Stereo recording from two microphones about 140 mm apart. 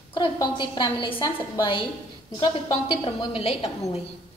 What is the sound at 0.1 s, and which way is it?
A woman's voice, 35° left (ahead or behind).